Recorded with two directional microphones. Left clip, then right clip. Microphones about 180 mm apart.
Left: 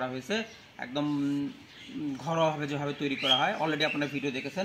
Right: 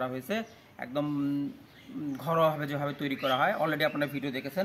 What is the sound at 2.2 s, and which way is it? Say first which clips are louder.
A man's voice: right 2 dB; 25° right (ahead or behind).